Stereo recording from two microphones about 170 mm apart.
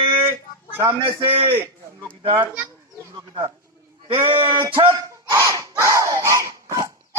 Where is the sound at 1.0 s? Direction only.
30° right (ahead or behind).